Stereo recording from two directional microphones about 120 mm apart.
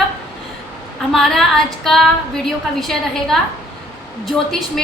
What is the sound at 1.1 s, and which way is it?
A woman's voice, 5° left (ahead or behind).